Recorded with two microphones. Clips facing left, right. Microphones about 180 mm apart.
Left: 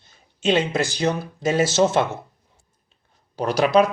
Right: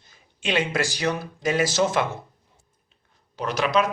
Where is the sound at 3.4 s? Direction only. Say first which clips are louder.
Left 5 dB; 35° left (ahead or behind).